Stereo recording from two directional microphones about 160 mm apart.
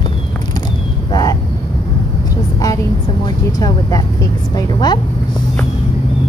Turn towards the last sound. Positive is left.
turn(degrees=25)  # may be behind; listen again after turning